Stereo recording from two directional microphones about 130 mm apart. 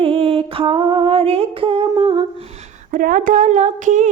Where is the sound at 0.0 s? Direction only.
45° right (ahead or behind).